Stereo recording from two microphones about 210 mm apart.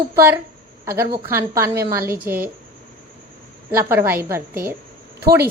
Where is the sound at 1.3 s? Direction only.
15° right (ahead or behind).